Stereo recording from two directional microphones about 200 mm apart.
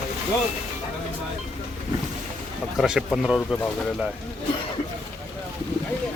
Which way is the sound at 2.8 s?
Centre (ahead or behind).